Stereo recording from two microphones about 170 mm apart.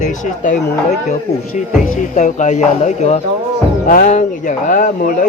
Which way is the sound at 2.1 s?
45° left (ahead or behind).